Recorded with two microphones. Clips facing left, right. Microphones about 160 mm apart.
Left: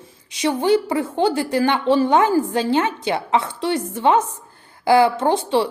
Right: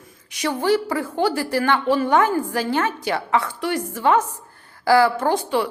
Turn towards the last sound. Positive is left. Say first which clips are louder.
# left 2 dB
turn(degrees=25)  # may be behind; listen again after turning